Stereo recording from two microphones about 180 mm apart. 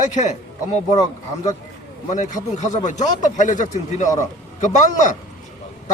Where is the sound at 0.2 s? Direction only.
40° left (ahead or behind).